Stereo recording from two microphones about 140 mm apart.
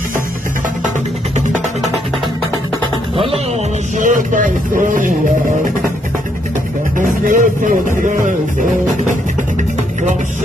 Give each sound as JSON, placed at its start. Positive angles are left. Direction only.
{"t": 4.0, "sound": "speech", "side_deg": -65}
{"t": 7.0, "sound": "speech", "side_deg": -70}